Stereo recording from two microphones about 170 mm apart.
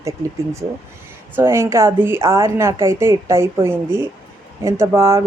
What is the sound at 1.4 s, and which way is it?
Speech, 15° right (ahead or behind).